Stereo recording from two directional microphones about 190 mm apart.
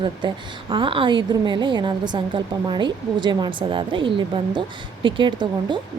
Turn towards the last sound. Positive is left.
turn(degrees=-25)  # may be behind; listen again after turning